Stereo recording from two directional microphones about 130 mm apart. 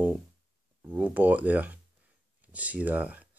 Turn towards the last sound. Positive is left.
turn(degrees=-10)  # may be behind; listen again after turning